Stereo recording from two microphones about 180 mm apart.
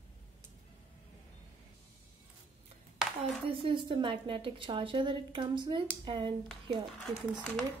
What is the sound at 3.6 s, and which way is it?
A woman's voice, 25° right (ahead or behind).